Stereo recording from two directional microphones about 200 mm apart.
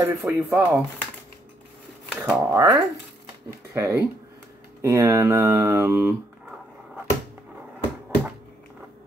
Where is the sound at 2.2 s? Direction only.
10° right (ahead or behind).